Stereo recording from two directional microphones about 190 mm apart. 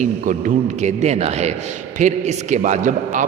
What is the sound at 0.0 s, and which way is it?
A man's voice, 40° right (ahead or behind).